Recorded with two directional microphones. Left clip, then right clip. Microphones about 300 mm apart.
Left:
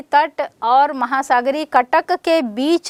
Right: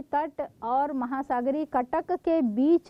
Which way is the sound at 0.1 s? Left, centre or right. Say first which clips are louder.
Left 13 dB; centre.